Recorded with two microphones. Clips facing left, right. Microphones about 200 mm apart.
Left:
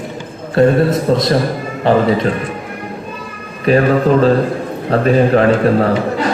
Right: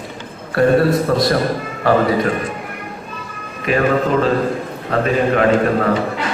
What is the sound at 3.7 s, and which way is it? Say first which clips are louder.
Speech: left 6 dB; 35° left (ahead or behind).